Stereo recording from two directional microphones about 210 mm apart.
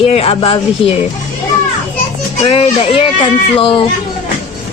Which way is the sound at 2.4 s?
25° left (ahead or behind).